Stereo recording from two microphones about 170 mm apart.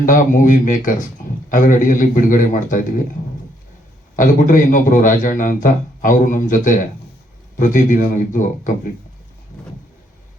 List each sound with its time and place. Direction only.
0.0 s a man's voice: 50° left (ahead or behind)
4.2 s a man's voice: 50° left (ahead or behind)